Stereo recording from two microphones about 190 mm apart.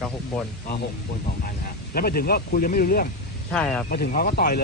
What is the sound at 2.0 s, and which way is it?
Speech, 50° left (ahead or behind).